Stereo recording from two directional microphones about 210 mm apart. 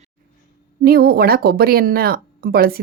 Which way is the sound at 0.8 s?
45° right (ahead or behind).